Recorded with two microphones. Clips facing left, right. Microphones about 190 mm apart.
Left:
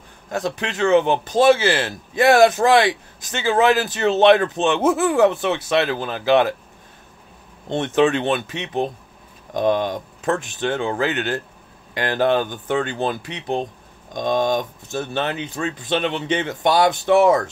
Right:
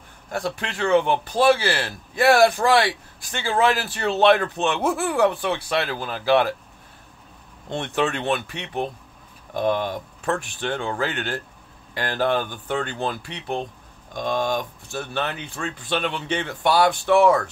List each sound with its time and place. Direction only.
0.3 s speech: 20° left (ahead or behind)
7.7 s speech: 20° left (ahead or behind)